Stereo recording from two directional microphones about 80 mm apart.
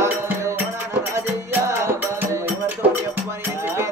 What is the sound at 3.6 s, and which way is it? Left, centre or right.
Music, right.